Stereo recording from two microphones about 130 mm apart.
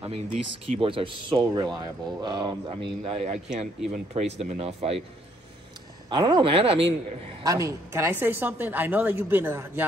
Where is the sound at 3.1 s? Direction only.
65° right (ahead or behind).